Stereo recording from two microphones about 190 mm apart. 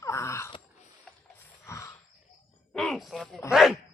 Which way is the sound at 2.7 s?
Centre (ahead or behind).